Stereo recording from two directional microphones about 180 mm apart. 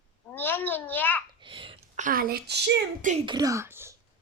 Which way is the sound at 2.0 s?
50° right (ahead or behind).